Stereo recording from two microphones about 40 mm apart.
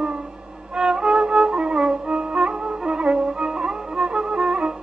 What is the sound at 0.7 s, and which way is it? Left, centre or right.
Music, centre.